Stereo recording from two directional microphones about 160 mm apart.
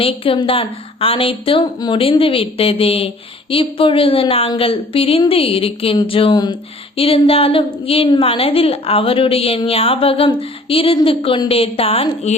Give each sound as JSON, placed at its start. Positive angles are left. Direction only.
{"t": 0.0, "sound": "a woman's voice", "side_deg": 35}
{"t": 6.3, "sound": "music", "side_deg": 25}
{"t": 6.9, "sound": "a woman's voice", "side_deg": 35}